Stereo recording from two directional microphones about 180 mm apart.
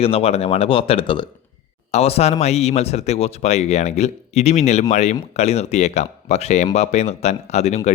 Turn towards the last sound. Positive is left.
turn(degrees=40)  # may be behind; listen again after turning